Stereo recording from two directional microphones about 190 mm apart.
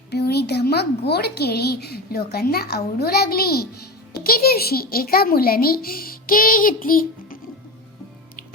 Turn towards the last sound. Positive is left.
turn(degrees=50)  # may be behind; listen again after turning